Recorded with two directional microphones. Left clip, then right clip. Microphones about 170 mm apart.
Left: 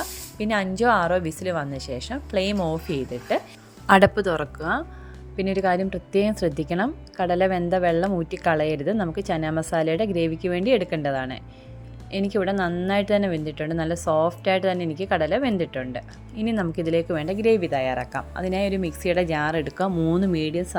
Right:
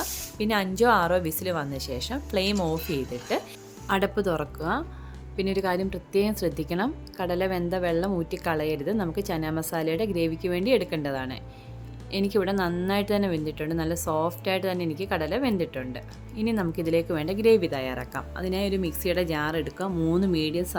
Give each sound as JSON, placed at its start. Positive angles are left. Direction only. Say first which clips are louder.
{"t": 0.0, "sound": "speech", "louder": "even", "side_deg": 15}
{"t": 3.8, "sound": "speech", "louder": "left 8 dB", "side_deg": 30}
{"t": 20.0, "sound": "speech", "louder": "right 2 dB", "side_deg": 10}